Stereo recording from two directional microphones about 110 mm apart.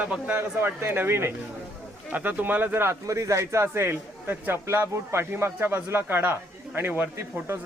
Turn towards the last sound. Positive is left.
turn(degrees=-20)  # may be behind; listen again after turning